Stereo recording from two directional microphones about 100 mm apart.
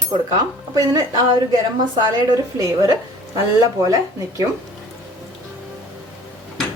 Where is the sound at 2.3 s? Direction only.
35° right (ahead or behind).